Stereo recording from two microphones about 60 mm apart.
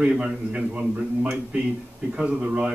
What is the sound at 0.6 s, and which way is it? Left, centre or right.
A man's voice, right.